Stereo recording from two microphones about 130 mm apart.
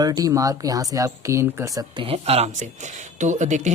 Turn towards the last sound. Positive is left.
turn(degrees=-65)  # may be behind; listen again after turning